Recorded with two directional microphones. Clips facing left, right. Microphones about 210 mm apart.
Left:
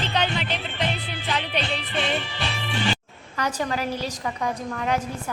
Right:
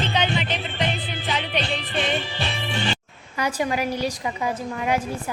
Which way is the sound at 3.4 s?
10° right (ahead or behind).